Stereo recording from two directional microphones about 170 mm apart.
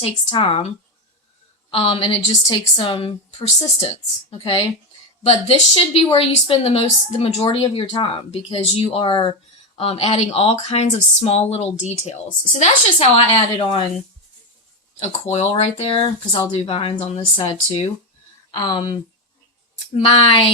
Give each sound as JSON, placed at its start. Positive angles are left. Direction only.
{"t": 0.0, "sound": "a woman's voice", "side_deg": 35}
{"t": 1.7, "sound": "a woman's voice", "side_deg": 35}
{"t": 15.0, "sound": "a woman's voice", "side_deg": 40}
{"t": 20.0, "sound": "speech", "side_deg": 30}